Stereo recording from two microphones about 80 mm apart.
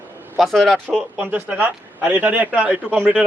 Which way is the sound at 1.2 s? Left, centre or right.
Right.